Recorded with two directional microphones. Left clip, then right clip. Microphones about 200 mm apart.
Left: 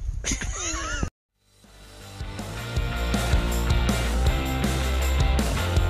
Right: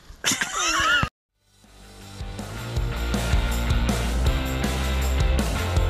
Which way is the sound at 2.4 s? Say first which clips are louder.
Left 1 dB; centre (ahead or behind).